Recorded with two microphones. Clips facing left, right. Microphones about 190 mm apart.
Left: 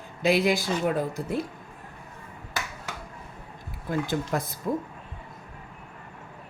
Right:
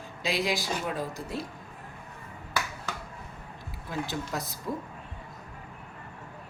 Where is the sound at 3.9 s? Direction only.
50° left (ahead or behind).